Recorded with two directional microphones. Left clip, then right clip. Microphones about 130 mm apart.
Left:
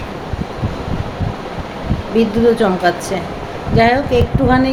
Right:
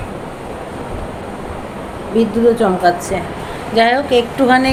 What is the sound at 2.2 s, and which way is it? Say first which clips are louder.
A woman's voice: even; 15° left (ahead or behind).